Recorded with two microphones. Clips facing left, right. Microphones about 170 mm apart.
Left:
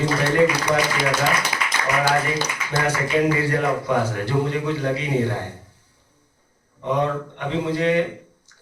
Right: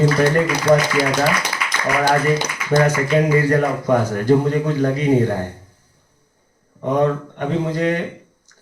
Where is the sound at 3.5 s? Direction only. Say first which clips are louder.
Right 4 dB; 45° right (ahead or behind).